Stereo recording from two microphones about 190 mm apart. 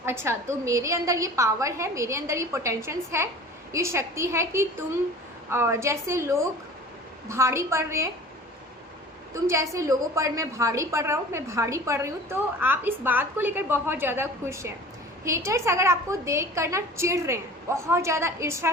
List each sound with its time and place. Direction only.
0.0 s a woman's voice: 15° right (ahead or behind)
9.3 s a woman's voice: 15° right (ahead or behind)